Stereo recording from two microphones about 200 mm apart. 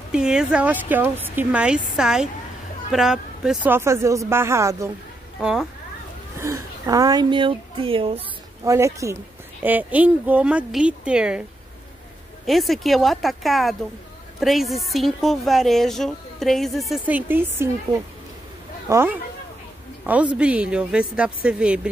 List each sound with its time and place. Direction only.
0.1 s a woman's voice: 5° right (ahead or behind)
5.4 s a woman's voice: 5° right (ahead or behind)
6.3 s speech: 15° right (ahead or behind)
8.6 s speech: 15° right (ahead or behind)
12.4 s a woman's voice: centre (ahead or behind)
18.9 s a woman's voice: 10° right (ahead or behind)